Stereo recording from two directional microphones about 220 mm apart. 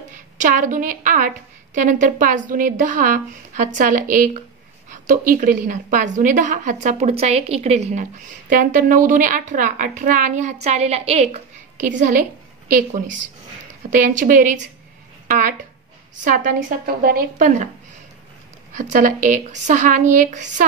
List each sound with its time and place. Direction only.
0.1 s a woman's voice: 35° right (ahead or behind)
18.7 s a woman's voice: 35° right (ahead or behind)